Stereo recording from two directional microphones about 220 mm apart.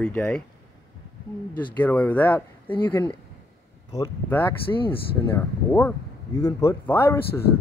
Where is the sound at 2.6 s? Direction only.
20° left (ahead or behind).